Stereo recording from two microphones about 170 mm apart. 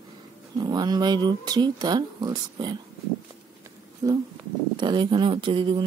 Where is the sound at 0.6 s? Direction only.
25° right (ahead or behind).